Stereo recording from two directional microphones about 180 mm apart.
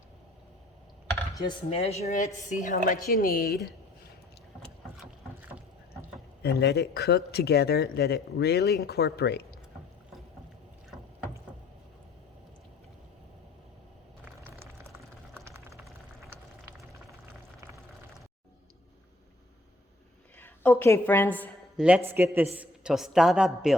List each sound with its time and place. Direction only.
1.4 s a woman's voice: 30° left (ahead or behind); by 3.7 s 60° left (ahead or behind)
6.4 s speech: 65° left (ahead or behind)
14.3 s a sound: 10° right (ahead or behind)
20.4 s a woman's voice: 10° left (ahead or behind)
21.8 s a man's voice: 5° right (ahead or behind)